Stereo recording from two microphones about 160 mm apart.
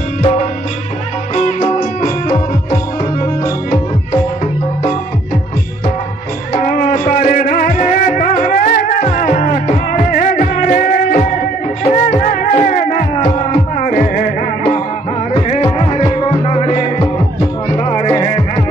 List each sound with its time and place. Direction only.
1.8 s music: 60° left (ahead or behind)
2.2 s music: 20° left (ahead or behind)
6.5 s music: 55° left (ahead or behind)
15.3 s music: 35° left (ahead or behind)